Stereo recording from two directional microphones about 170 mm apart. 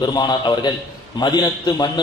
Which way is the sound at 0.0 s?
25° left (ahead or behind).